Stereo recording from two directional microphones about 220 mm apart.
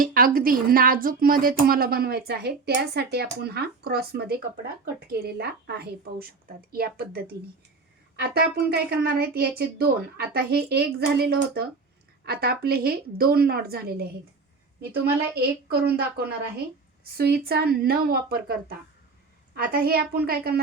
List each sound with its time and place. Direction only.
0.0 s a woman's voice: 40° right (ahead or behind)
15.4 s a woman's voice: 45° right (ahead or behind)
19.5 s a woman's voice: 40° right (ahead or behind)